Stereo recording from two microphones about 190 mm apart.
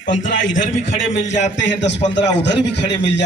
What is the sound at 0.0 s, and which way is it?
Speech, 45° left (ahead or behind).